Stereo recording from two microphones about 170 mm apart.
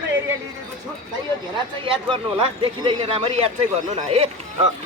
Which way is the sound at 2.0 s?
30° right (ahead or behind).